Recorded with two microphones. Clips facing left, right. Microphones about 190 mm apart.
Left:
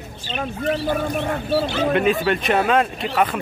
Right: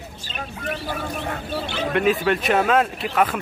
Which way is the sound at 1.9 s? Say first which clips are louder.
Right 1 dB; centre (ahead or behind).